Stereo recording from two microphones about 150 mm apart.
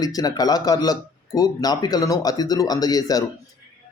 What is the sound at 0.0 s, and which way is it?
Speech, 25° left (ahead or behind).